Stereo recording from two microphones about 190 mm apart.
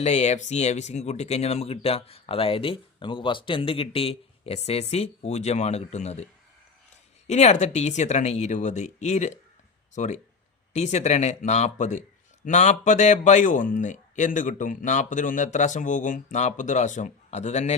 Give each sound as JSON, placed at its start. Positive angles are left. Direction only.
{"t": 0.0, "sound": "speech", "side_deg": 35}
{"t": 7.3, "sound": "speech", "side_deg": 35}